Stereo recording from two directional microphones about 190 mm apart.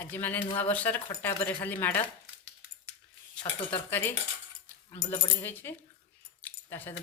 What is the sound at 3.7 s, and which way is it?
Speech, 10° left (ahead or behind).